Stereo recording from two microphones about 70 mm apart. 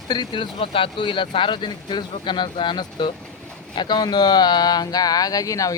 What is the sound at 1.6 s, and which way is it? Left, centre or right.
Speech, left.